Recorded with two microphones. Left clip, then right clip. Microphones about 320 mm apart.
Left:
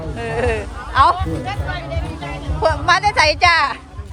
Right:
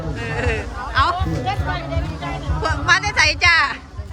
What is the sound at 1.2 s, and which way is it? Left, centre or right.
Music, centre.